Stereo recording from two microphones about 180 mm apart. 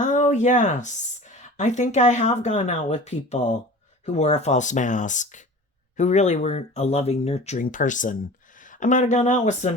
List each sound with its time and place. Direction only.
0.0 s speech: 45° left (ahead or behind)